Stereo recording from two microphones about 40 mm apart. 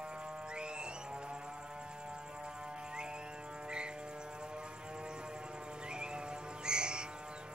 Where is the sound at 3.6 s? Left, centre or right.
Right.